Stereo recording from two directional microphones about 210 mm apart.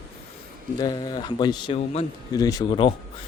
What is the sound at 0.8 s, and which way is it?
A man's voice, 20° left (ahead or behind).